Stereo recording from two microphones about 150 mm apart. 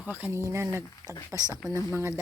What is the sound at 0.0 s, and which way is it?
Speech, 10° right (ahead or behind).